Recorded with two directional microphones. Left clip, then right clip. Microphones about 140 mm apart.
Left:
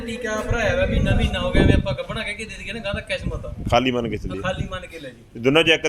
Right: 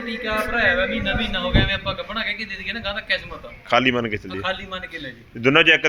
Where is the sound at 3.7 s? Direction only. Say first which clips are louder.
Right 1 dB; 10° left (ahead or behind).